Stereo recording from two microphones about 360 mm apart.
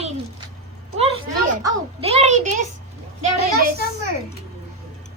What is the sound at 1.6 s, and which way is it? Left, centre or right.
A child's voice, centre.